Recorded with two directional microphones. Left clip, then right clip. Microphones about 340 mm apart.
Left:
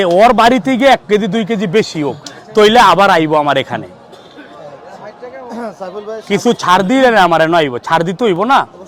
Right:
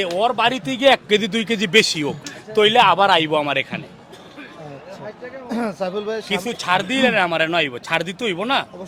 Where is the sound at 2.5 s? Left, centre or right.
Left.